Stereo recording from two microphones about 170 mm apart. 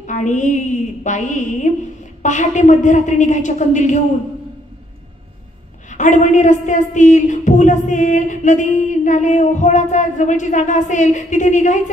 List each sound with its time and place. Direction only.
0.0 s a woman's voice: 45° left (ahead or behind)
5.9 s a woman's voice: 45° left (ahead or behind)